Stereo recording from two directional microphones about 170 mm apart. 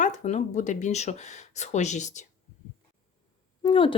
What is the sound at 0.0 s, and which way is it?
Speech, 45° left (ahead or behind).